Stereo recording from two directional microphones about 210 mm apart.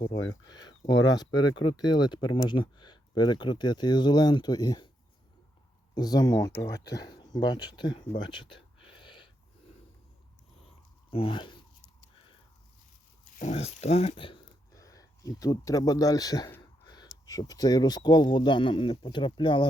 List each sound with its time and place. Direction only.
0.9 s speech: 20° left (ahead or behind)
5.9 s speech: 20° left (ahead or behind)
9.0 s gasp: 25° left (ahead or behind)
11.1 s speech: 25° left (ahead or behind)
13.4 s speech: 30° left (ahead or behind)